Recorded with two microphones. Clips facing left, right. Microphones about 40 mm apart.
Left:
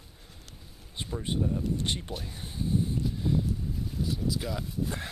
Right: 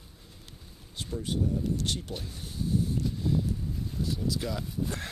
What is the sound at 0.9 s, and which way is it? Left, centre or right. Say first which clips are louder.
Speech: even; left.